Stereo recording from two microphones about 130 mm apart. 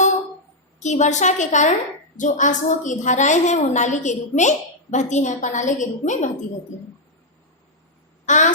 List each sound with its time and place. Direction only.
0.8 s a woman's voice: 65° left (ahead or behind)
8.3 s a woman's voice: 70° left (ahead or behind)